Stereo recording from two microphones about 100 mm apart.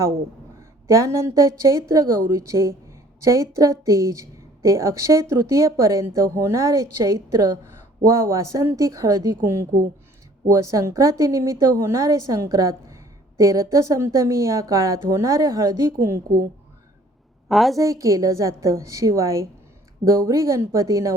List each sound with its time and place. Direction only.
0.9 s a woman's voice: 30° right (ahead or behind)
17.5 s a woman's voice: centre (ahead or behind)
17.7 s a woman's voice: 30° right (ahead or behind)